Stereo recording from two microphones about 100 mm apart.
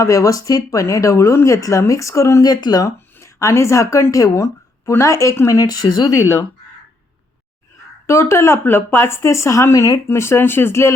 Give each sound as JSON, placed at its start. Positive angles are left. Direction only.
{"t": 0.0, "sound": "speech", "side_deg": 35}
{"t": 6.1, "sound": "speech", "side_deg": 25}
{"t": 8.0, "sound": "speech", "side_deg": 30}